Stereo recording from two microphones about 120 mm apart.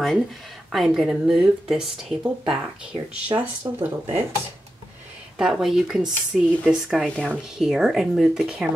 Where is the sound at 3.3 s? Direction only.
35° right (ahead or behind).